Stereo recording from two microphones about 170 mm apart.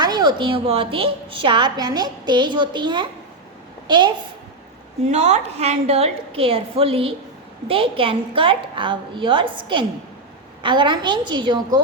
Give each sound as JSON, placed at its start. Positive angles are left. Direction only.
{"t": 0.0, "sound": "a woman's voice", "side_deg": -25}
{"t": 5.0, "sound": "a woman's voice", "side_deg": -40}